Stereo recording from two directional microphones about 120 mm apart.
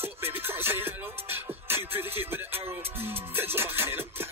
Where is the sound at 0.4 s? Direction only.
20° right (ahead or behind).